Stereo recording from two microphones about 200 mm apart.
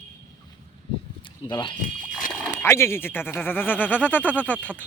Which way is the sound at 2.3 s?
5° left (ahead or behind).